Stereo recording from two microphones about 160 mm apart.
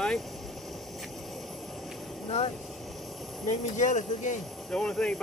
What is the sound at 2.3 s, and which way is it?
Speech, 45° left (ahead or behind).